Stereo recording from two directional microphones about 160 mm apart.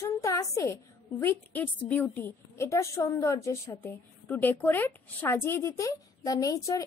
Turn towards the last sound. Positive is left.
turn(degrees=20)  # may be behind; listen again after turning